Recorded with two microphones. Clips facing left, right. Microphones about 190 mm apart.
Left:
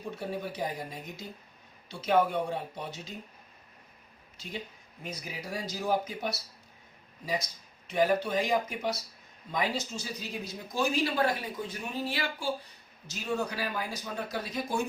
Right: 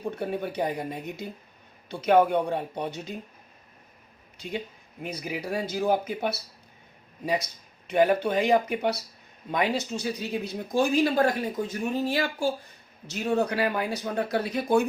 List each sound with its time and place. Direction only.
0.0 s speech: 60° right (ahead or behind)
5.0 s speech: 60° right (ahead or behind); by 12.5 s 45° right (ahead or behind)
13.1 s speech: 60° right (ahead or behind)